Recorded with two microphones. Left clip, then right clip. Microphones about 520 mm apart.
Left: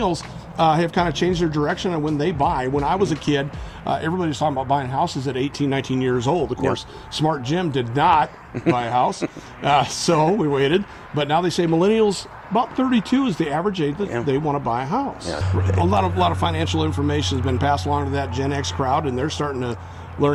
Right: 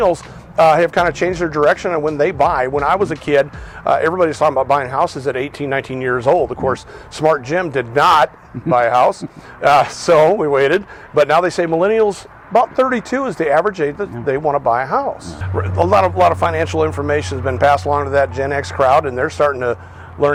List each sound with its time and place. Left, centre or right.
0.0 s a man's voice: right